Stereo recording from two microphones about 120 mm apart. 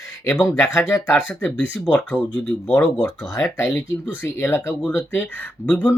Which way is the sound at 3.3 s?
25° left (ahead or behind).